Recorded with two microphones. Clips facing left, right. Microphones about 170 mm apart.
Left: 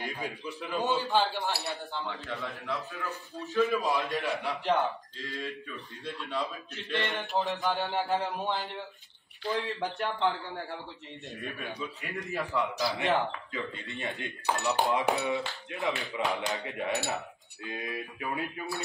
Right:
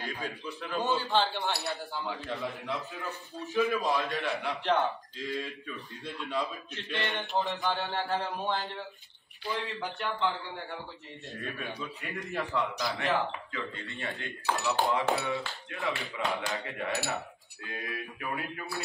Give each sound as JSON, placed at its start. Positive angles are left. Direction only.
{"t": 0.0, "sound": "a man's voice", "side_deg": 20}
{"t": 0.5, "sound": "speech", "side_deg": 0}
{"t": 2.2, "sound": "a man's voice", "side_deg": -20}
{"t": 3.5, "sound": "speech", "side_deg": 0}
{"t": 7.7, "sound": "speech", "side_deg": 15}
{"t": 11.3, "sound": "speech", "side_deg": 0}
{"t": 12.9, "sound": "speech", "side_deg": 20}
{"t": 16.0, "sound": "speech", "side_deg": 0}
{"t": 16.4, "sound": "speech", "side_deg": 20}